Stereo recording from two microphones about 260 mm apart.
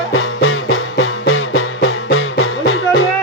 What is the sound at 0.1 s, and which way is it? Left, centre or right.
Music, left.